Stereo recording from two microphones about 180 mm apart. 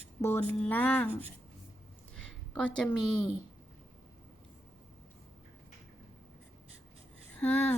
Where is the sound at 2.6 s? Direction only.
5° left (ahead or behind).